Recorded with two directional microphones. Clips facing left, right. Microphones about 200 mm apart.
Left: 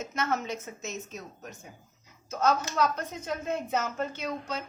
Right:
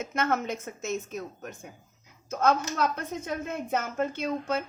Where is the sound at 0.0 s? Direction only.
55° right (ahead or behind).